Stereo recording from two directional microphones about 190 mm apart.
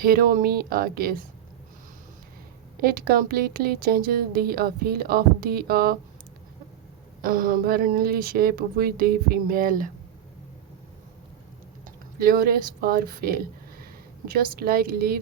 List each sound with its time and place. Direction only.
0.0 s speech: 50° right (ahead or behind)
2.7 s speech: 50° right (ahead or behind)
7.2 s speech: 50° right (ahead or behind)
11.9 s speech: 50° right (ahead or behind)